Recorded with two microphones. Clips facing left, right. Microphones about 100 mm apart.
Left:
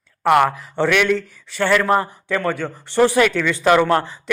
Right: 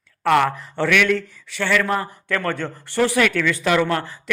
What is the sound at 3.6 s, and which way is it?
Speech, 30° left (ahead or behind).